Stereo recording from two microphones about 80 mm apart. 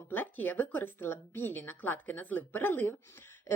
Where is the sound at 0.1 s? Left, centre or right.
Left.